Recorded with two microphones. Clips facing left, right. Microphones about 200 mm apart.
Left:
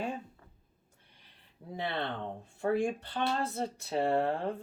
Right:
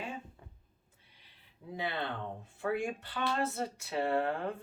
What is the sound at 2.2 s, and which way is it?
Speech, 35° left (ahead or behind).